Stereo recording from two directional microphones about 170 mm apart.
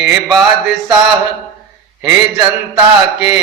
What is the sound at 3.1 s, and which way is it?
Speech, 5° right (ahead or behind).